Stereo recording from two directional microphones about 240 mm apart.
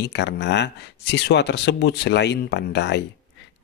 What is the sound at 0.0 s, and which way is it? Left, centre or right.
Speech, left.